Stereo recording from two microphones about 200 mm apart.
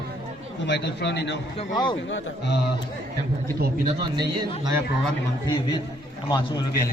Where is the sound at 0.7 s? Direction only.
60° left (ahead or behind).